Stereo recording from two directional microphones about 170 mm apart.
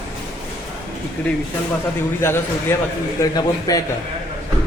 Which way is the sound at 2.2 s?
15° left (ahead or behind).